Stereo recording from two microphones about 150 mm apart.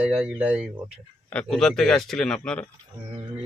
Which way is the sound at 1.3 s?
5° left (ahead or behind).